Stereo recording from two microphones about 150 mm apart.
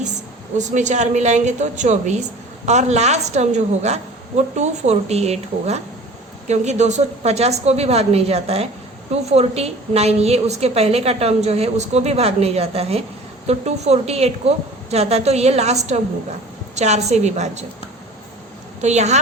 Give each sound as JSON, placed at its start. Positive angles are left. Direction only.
{"t": 0.6, "sound": "a woman's voice", "side_deg": -50}
{"t": 18.8, "sound": "a woman's voice", "side_deg": -50}